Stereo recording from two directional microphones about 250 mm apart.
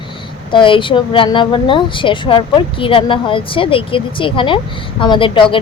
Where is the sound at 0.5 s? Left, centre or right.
Centre.